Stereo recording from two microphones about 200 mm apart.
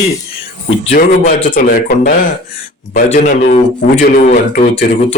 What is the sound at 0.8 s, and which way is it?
Speech, 40° left (ahead or behind).